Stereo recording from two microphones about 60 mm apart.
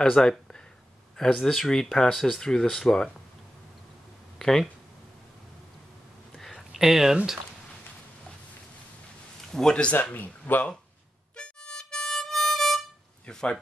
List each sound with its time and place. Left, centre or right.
0.0 s speech: centre
4.4 s speech: centre
6.3 s a sound: centre
6.7 s speech: centre
9.4 s a man's voice: centre
10.1 s speech: left
11.3 s harmonica: centre
13.3 s speech: centre